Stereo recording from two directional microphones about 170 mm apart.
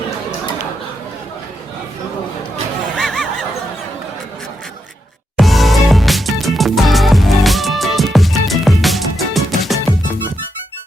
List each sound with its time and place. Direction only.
3.0 s snicker: centre (ahead or behind)
5.4 s music: centre (ahead or behind)